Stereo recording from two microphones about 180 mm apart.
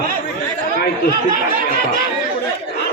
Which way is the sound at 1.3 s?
50° right (ahead or behind).